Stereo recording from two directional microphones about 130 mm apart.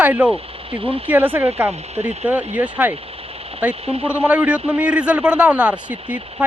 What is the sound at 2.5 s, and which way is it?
A man's voice, 10° right (ahead or behind).